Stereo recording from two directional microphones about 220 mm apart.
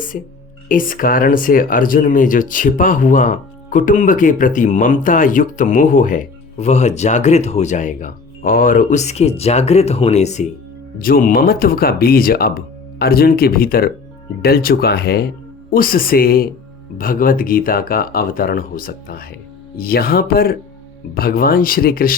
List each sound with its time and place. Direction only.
0.7 s speech: 40° left (ahead or behind)
10.9 s speech: 40° left (ahead or behind)